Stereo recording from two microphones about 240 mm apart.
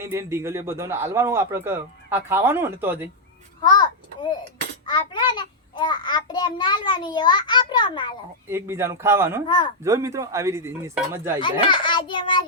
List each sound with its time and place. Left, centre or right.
0.0 s a man's voice: centre
3.6 s tick: centre
4.9 s a child's voice: centre
8.4 s a man's voice: centre
9.5 s a child's voice: left
9.8 s a man's voice: centre
11.3 s a child's voice: centre